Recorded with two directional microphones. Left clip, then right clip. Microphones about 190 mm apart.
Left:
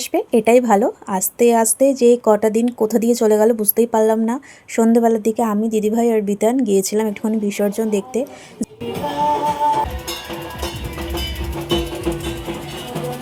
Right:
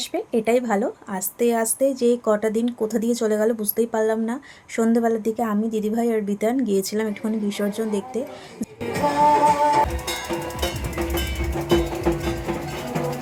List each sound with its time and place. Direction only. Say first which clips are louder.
0.1 s a woman's voice: left 8 dB; 35° left (ahead or behind)
8.9 s music: right 2 dB; 25° right (ahead or behind)